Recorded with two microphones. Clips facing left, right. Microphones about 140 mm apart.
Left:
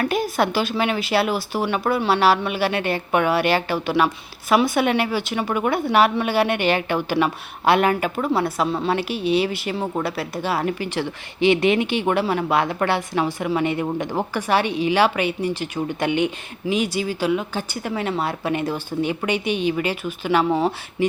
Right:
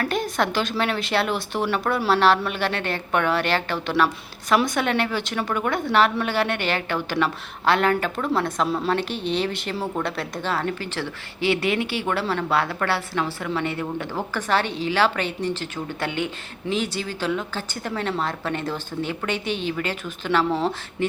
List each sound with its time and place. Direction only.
0.0 s a woman's voice: 5° left (ahead or behind)